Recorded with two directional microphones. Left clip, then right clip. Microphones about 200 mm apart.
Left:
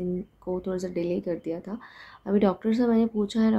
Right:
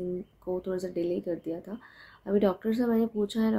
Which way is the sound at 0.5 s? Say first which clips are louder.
Left 2 dB; 5° left (ahead or behind).